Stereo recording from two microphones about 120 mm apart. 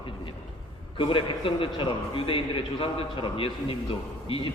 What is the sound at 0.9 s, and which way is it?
A man's voice, 45° left (ahead or behind).